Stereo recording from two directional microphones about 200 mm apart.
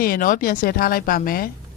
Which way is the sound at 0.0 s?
45° left (ahead or behind).